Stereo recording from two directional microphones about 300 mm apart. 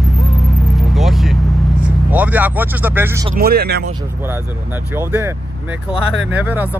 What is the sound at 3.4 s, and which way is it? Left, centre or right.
Speech, right.